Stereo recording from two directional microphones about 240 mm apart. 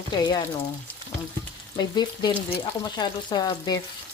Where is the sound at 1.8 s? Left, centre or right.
Centre.